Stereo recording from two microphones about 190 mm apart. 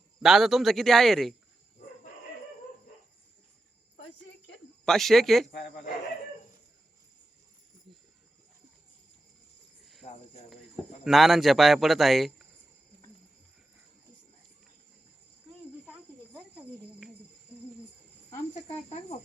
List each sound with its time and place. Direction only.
0.2 s speech: centre (ahead or behind)
4.9 s speech: centre (ahead or behind)
9.8 s cricket: centre (ahead or behind)
11.0 s speech: centre (ahead or behind)
15.9 s cricket: 5° right (ahead or behind)
18.5 s speech: 35° left (ahead or behind)